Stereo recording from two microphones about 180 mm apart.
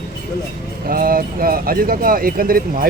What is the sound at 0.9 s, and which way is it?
Speech, 55° right (ahead or behind).